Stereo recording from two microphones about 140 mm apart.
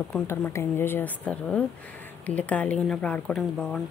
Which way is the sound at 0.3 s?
20° left (ahead or behind).